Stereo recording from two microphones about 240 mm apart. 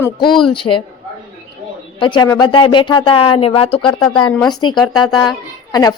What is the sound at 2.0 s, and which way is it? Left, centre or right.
A woman's voice, centre.